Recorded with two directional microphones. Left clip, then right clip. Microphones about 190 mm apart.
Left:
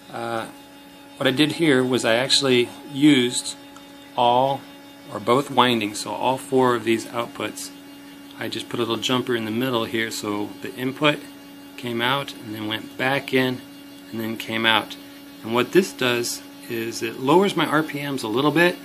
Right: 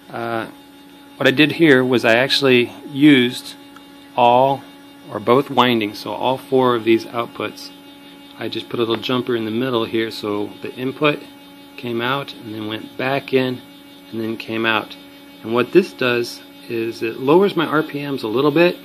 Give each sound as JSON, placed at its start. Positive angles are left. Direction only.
{"t": 0.1, "sound": "speech", "side_deg": -35}